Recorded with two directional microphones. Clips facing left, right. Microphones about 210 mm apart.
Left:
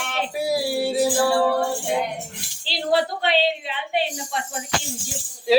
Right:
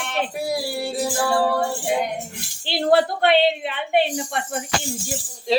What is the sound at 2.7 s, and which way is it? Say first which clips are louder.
A woman's voice: right 4 dB; 55° right (ahead or behind).